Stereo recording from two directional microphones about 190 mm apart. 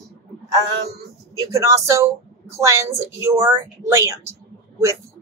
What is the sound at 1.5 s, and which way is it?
Speech, 15° right (ahead or behind).